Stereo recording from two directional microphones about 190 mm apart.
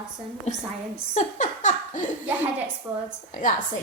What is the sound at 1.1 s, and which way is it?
Laughter, 40° left (ahead or behind).